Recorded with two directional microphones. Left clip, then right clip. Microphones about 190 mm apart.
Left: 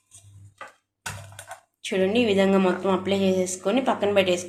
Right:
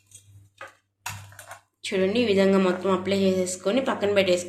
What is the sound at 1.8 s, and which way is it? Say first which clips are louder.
Speech: left 1 dB; 15° left (ahead or behind).